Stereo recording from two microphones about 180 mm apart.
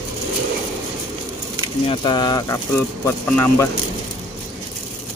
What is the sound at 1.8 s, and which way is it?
Speech, 25° left (ahead or behind).